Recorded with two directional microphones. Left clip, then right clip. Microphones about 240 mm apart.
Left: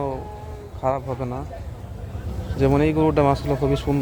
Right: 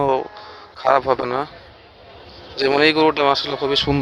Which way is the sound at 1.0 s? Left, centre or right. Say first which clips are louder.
Right 10 dB; right.